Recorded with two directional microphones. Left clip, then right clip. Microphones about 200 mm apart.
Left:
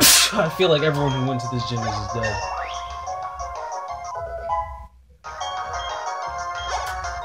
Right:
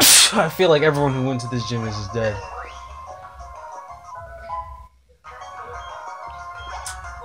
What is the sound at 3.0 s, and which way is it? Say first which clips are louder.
Music: left 8 dB; 35° left (ahead or behind).